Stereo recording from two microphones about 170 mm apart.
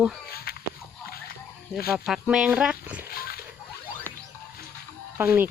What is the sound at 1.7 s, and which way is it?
Speech, 15° left (ahead or behind).